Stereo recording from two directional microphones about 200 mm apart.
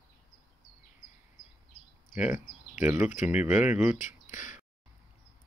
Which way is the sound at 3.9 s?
40° left (ahead or behind).